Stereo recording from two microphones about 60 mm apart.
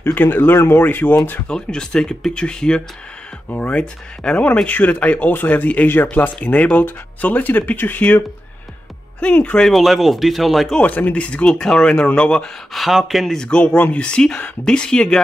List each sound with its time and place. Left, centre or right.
0.0 s speech: left
1.5 s speech: centre; by 8.2 s left
9.2 s speech: left
9.7 s speech: centre
10.8 s speech: left
12.7 s speech: centre
13.4 s speech: centre